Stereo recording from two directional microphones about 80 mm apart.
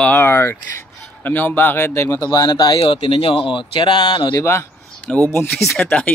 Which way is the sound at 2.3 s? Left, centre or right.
Left.